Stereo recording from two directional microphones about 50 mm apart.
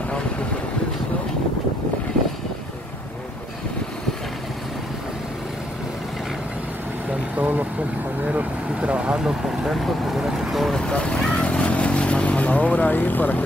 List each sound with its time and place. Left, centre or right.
7.3 s speech: right; by 10.7 s centre
10.7 s speech: centre; by 13.4 s left